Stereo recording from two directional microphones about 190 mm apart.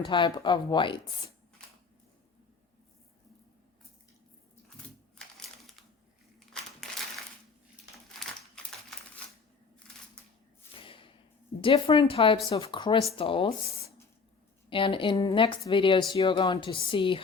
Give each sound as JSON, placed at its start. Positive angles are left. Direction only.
{"t": 0.0, "sound": "speech", "side_deg": 25}
{"t": 5.1, "sound": "typewriter", "side_deg": 0}
{"t": 6.4, "sound": "crumpling", "side_deg": 0}
{"t": 8.6, "sound": "typewriter", "side_deg": 5}
{"t": 10.8, "sound": "whip", "side_deg": 30}
{"t": 11.6, "sound": "speech", "side_deg": 25}